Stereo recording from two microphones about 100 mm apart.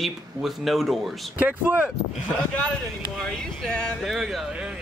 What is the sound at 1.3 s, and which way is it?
Speech, 15° right (ahead or behind).